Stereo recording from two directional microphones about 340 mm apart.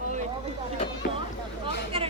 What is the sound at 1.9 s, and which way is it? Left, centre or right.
Chatter, centre.